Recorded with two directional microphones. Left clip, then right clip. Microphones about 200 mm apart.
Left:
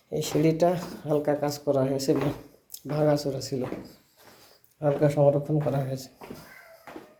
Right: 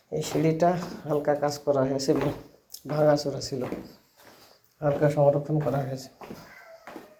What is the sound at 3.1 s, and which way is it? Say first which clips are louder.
Speech: right 1 dB; 40° left (ahead or behind).